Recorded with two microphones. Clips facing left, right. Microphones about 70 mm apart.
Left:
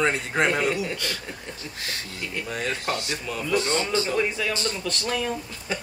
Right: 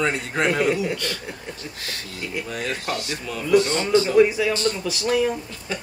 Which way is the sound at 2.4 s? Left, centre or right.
Left.